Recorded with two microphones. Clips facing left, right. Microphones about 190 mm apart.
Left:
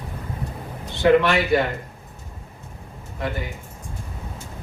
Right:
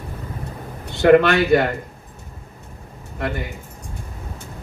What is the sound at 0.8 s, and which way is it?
Speech, 65° right (ahead or behind).